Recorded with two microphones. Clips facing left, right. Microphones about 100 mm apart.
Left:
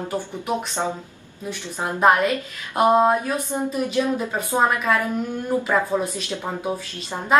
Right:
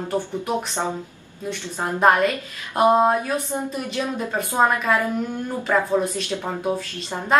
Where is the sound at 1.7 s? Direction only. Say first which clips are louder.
Even; 10° left (ahead or behind).